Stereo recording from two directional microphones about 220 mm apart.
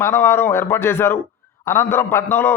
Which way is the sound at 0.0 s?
10° left (ahead or behind).